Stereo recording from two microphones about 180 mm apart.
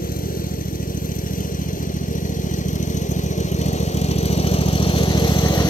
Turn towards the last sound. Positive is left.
turn(degrees=25)  # may be behind; listen again after turning